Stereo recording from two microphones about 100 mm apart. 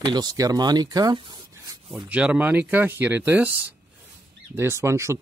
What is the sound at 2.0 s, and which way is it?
Speech, 10° right (ahead or behind).